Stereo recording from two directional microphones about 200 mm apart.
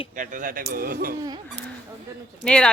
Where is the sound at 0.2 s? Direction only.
40° right (ahead or behind).